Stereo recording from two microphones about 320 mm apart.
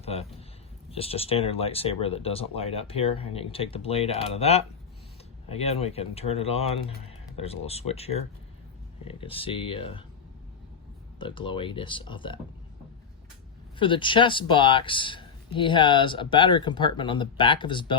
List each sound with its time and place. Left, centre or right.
0.0 s speech: centre
11.2 s speech: centre
13.7 s speech: centre